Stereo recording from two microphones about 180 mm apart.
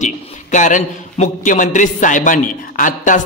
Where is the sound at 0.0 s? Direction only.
45° left (ahead or behind).